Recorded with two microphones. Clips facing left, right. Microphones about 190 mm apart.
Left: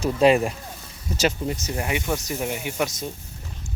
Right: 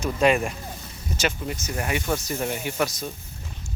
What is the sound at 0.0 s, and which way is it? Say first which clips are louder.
Speech: left 3 dB; 35° left (ahead or behind).